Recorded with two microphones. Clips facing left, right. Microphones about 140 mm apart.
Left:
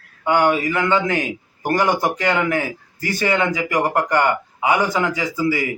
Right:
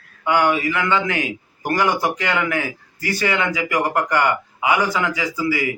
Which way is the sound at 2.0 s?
45° left (ahead or behind).